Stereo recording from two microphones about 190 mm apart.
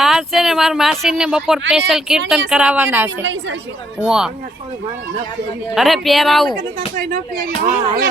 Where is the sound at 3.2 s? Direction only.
75° right (ahead or behind).